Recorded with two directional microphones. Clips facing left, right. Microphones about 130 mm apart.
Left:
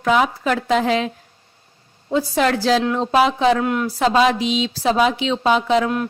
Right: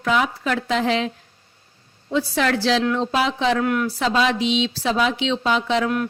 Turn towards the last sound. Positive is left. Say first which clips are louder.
# left 4 dB
turn(degrees=40)  # may be behind; listen again after turning